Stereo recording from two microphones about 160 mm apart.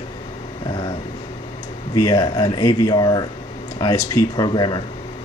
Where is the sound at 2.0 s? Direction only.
25° left (ahead or behind).